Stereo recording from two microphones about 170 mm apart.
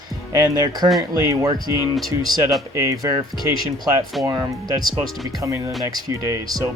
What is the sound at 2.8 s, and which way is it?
Speech, 20° right (ahead or behind).